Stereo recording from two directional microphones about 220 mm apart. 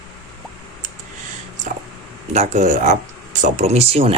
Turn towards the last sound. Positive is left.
turn(degrees=-25)  # may be behind; listen again after turning